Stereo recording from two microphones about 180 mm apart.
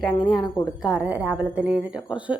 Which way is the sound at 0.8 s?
5° right (ahead or behind).